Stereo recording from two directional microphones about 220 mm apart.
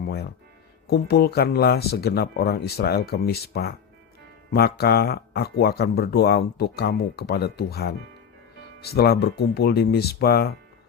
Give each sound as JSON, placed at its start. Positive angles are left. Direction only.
{"t": 0.0, "sound": "music", "side_deg": 45}
{"t": 0.9, "sound": "speech", "side_deg": 45}